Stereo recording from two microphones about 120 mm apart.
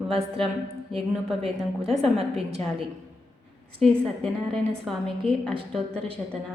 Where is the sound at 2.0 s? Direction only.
55° right (ahead or behind).